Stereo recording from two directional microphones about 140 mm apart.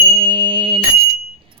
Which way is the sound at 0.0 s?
40° right (ahead or behind).